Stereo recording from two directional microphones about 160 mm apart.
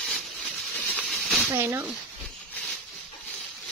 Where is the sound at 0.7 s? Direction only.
10° left (ahead or behind).